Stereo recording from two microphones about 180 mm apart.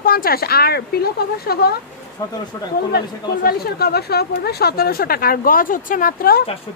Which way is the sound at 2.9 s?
60° left (ahead or behind).